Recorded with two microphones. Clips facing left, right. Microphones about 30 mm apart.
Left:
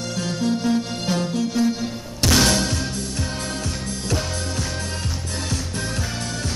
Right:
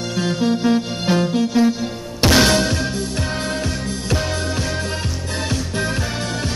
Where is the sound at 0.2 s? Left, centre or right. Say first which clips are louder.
Right 5 dB; right.